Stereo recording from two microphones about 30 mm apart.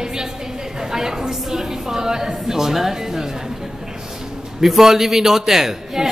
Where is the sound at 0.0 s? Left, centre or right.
Right.